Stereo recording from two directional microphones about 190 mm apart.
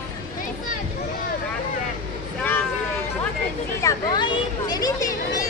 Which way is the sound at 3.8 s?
20° left (ahead or behind).